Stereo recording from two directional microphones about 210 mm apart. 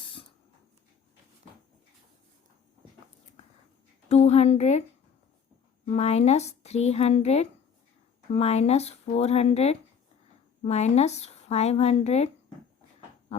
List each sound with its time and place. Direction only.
0.0 s a sound: 25° left (ahead or behind)
4.1 s speech: 30° left (ahead or behind)
5.9 s speech: 30° left (ahead or behind)